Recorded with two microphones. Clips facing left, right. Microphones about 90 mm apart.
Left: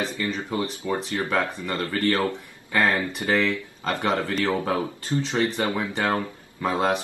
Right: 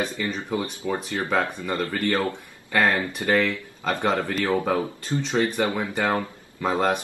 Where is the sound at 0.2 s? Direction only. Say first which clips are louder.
Even; 20° right (ahead or behind).